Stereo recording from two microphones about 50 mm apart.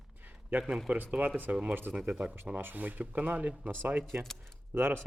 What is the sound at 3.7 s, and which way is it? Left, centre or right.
Speech, right.